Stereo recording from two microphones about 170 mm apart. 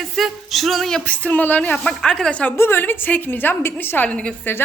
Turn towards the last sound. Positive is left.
turn(degrees=10)  # may be behind; listen again after turning